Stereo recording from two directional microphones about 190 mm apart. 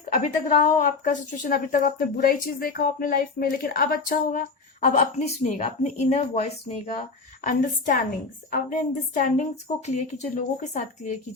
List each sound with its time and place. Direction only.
0.2 s a woman's voice: 40° left (ahead or behind)
7.4 s a woman's voice: 45° left (ahead or behind)